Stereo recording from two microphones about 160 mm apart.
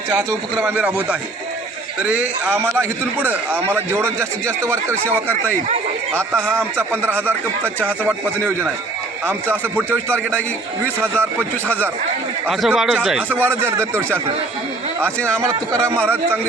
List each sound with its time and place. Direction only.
0.1 s a man's voice: 15° right (ahead or behind)
6.1 s speech: 5° left (ahead or behind)
6.5 s a man's voice: 15° right (ahead or behind)
10.8 s speech: 10° left (ahead or behind)
12.5 s a man's voice: centre (ahead or behind)
15.0 s speech: 10° left (ahead or behind)
15.4 s speech: 20° right (ahead or behind)